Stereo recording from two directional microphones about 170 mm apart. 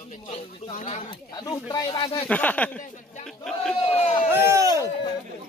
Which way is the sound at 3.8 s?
35° left (ahead or behind).